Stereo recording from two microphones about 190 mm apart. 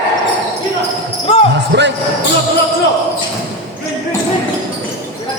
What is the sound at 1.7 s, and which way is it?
Basketball bounce, 65° right (ahead or behind).